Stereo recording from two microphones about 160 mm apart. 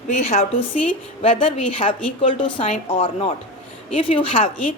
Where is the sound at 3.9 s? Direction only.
35° left (ahead or behind).